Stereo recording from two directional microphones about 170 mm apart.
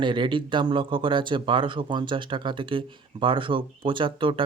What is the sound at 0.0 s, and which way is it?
Speech, 30° right (ahead or behind).